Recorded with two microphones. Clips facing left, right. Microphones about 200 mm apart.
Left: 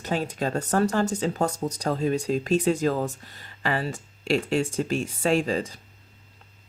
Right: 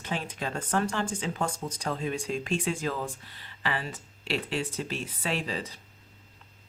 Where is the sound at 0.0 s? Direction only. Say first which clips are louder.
Left 7 dB; 40° left (ahead or behind).